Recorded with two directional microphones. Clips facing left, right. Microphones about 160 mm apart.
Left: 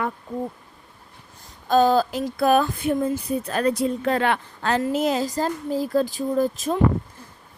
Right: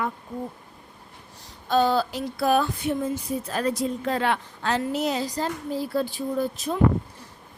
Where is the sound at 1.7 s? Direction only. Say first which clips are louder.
Left 4 dB; 45° left (ahead or behind).